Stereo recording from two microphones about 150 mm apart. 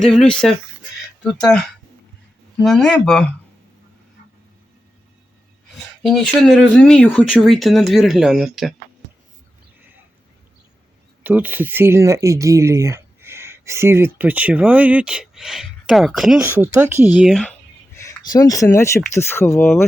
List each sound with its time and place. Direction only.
0.0 s speech: 5° left (ahead or behind)
2.6 s speech: centre (ahead or behind)
6.0 s speech: centre (ahead or behind)
11.2 s speech: 10° right (ahead or behind)
16.4 s speech: 15° right (ahead or behind)
17.9 s speech: 20° left (ahead or behind)